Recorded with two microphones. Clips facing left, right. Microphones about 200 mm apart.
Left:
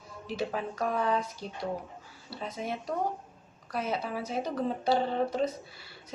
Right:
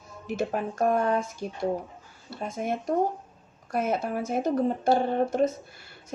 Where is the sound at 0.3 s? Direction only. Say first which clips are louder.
Right 4 dB; 50° right (ahead or behind).